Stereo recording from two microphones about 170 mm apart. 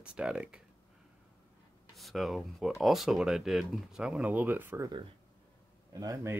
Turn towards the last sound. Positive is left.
turn(degrees=-20)  # may be behind; listen again after turning